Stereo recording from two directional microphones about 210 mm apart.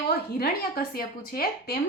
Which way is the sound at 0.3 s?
45° left (ahead or behind).